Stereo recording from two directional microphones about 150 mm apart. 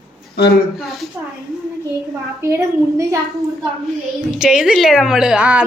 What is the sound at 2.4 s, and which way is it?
Speech, 20° right (ahead or behind).